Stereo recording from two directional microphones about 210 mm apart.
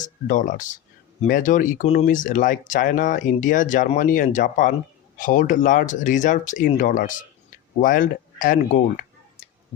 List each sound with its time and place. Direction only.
0.0 s speech: 40° left (ahead or behind)